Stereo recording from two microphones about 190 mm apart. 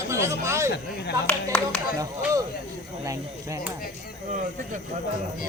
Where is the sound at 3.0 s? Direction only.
15° right (ahead or behind).